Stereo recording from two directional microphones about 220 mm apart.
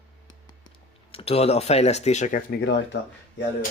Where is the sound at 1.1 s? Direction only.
25° left (ahead or behind); by 2.8 s 45° left (ahead or behind).